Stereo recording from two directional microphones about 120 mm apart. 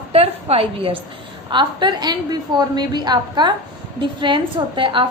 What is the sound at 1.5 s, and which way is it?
A woman's voice, 40° right (ahead or behind).